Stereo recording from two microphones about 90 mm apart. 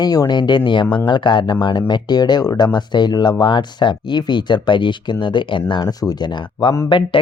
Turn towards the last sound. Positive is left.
turn(degrees=60)  # may be behind; listen again after turning